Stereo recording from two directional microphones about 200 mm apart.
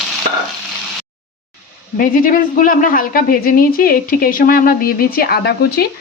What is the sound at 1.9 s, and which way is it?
A woman's voice, 45° left (ahead or behind).